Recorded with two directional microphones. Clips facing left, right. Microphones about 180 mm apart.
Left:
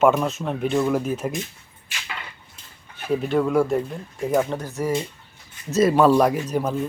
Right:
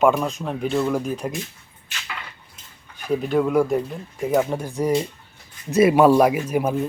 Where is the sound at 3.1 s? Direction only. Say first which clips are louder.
Right 1 dB; centre (ahead or behind).